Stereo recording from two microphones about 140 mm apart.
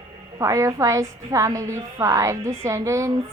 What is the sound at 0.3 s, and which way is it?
A woman's voice, 20° right (ahead or behind).